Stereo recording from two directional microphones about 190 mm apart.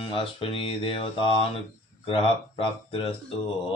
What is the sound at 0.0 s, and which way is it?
Speech, 30° left (ahead or behind).